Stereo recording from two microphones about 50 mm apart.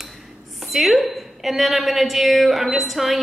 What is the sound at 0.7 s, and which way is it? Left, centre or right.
A woman's voice, centre.